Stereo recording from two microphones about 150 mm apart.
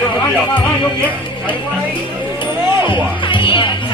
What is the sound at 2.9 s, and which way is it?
Music, 35° left (ahead or behind).